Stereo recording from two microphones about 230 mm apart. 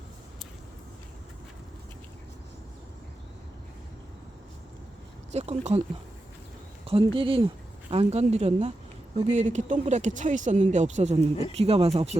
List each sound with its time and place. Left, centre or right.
5.3 s speech: right
6.8 s speech: right